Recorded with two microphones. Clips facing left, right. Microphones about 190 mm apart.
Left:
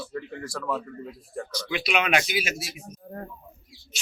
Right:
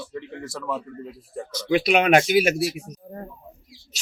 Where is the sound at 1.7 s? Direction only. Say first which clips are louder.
Right 8 dB; 50° right (ahead or behind).